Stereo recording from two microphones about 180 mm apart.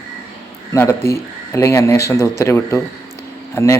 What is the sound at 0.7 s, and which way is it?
A man's voice, 15° left (ahead or behind).